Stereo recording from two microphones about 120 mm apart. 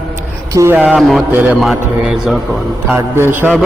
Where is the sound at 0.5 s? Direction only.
25° right (ahead or behind).